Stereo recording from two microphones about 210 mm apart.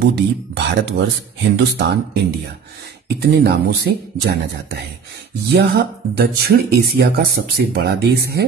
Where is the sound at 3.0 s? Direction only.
50° right (ahead or behind).